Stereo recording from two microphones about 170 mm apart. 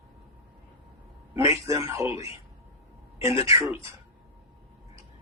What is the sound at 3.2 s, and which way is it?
Speech, 20° right (ahead or behind).